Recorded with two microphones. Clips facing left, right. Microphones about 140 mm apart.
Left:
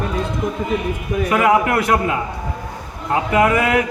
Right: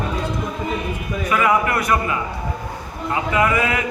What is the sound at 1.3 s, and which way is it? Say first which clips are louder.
Speech: left 3 dB; 60° left (ahead or behind).